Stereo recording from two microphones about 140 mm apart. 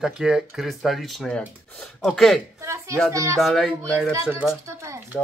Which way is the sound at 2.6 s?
20° right (ahead or behind).